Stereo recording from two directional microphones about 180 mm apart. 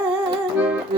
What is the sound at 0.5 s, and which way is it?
Music, 5° right (ahead or behind).